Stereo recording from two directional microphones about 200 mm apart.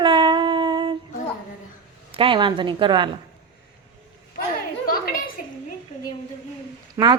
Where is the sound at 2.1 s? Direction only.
25° right (ahead or behind).